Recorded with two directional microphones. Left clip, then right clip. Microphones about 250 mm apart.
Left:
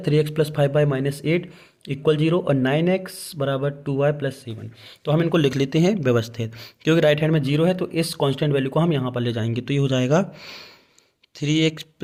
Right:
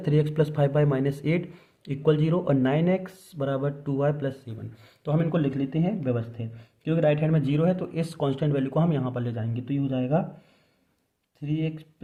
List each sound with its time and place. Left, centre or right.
0.0 s speech: centre; by 12.0 s left